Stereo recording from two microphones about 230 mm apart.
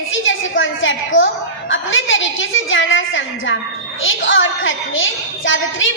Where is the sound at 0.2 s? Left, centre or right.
Left.